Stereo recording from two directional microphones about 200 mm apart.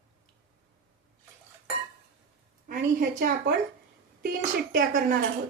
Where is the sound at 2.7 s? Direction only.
45° right (ahead or behind).